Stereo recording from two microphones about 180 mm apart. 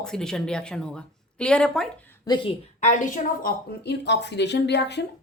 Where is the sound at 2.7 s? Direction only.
45° left (ahead or behind).